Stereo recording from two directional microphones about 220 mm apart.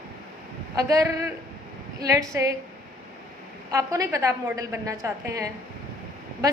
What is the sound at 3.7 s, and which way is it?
A woman's voice, 15° right (ahead or behind).